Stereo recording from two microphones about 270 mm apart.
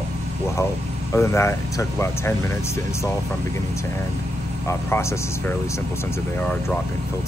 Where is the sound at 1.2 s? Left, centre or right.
Centre.